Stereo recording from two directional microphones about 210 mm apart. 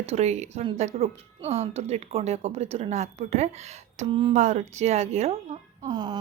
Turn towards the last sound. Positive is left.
turn(degrees=-20)  # may be behind; listen again after turning